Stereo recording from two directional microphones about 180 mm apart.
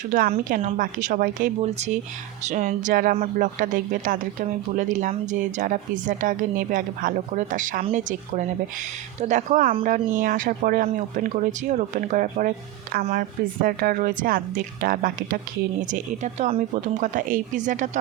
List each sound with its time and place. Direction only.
0.1 s speech: 50° right (ahead or behind)